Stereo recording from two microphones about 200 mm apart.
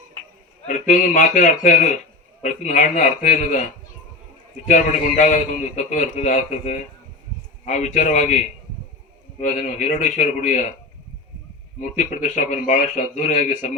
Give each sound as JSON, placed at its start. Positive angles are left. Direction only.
{"t": 0.7, "sound": "a man's voice", "side_deg": 40}
{"t": 4.7, "sound": "a man's voice", "side_deg": 40}
{"t": 9.4, "sound": "a man's voice", "side_deg": 40}
{"t": 11.8, "sound": "a man's voice", "side_deg": 40}